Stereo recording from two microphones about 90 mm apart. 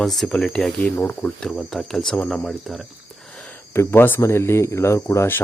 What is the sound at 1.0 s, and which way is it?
Speech, 20° left (ahead or behind).